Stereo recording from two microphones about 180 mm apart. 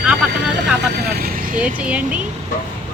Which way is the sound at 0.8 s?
65° right (ahead or behind).